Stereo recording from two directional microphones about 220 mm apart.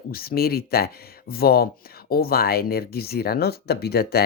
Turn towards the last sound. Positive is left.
turn(degrees=45)  # may be behind; listen again after turning